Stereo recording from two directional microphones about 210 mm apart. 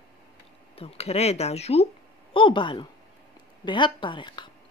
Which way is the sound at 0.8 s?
30° left (ahead or behind).